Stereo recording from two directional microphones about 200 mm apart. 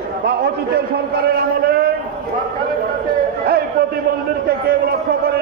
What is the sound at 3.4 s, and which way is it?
A man's voice, 50° right (ahead or behind).